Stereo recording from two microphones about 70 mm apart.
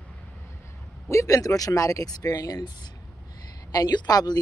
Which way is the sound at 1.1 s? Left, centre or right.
Left.